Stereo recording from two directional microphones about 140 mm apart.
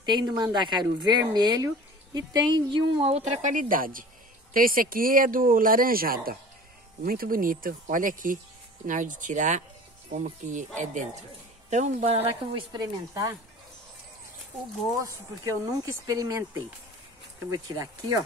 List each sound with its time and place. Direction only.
0.0 s a woman's voice: 30° right (ahead or behind)
3.1 s speech: 50° right (ahead or behind)
12.7 s speech: 25° right (ahead or behind)
15.0 s speech: 25° right (ahead or behind)